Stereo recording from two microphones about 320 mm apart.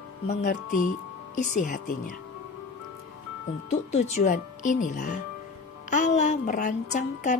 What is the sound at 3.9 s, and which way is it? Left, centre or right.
Speech, left.